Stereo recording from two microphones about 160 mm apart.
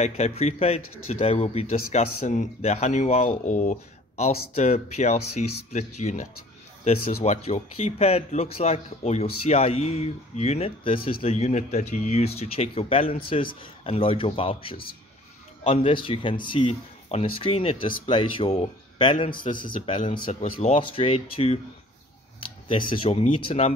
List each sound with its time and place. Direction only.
0.0 s a man's voice: 40° left (ahead or behind)
19.7 s speech: 55° left (ahead or behind)
20.5 s speech: 35° left (ahead or behind)